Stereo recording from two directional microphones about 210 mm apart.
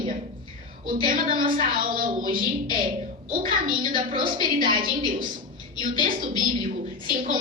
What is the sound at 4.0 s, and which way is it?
Speech, 25° right (ahead or behind).